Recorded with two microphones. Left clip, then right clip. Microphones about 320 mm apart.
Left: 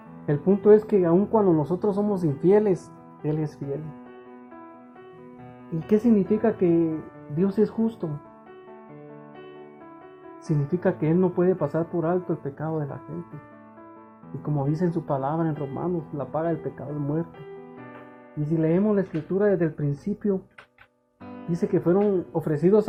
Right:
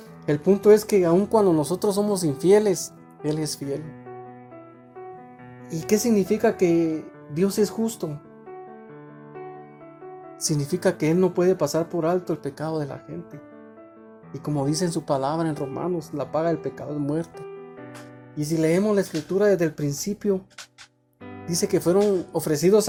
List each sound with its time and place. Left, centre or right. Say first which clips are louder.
0.3 s speech: right 1 dB; right
5.9 s speech: right 1 dB; right
10.4 s speech: right 2 dB; right
14.4 s speech: right 2 dB; right
18.5 s speech: right 2 dB; right
21.5 s speech: right 2 dB; right